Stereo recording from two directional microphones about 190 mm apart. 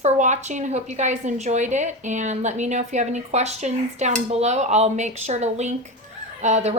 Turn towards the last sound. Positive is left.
turn(degrees=-35)  # may be behind; listen again after turning